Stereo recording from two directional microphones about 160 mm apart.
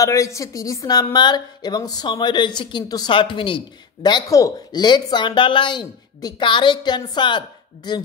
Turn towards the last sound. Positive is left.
turn(degrees=30)  # may be behind; listen again after turning